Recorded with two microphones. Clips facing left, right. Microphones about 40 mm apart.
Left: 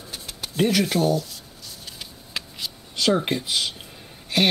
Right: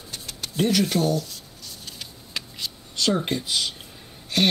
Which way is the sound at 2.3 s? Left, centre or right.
Centre.